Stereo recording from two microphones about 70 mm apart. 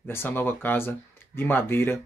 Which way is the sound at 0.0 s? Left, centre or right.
Left.